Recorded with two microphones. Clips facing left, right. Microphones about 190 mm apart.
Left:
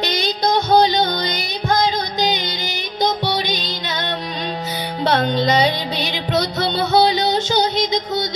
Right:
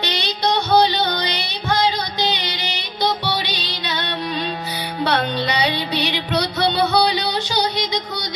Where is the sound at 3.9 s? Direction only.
45° left (ahead or behind).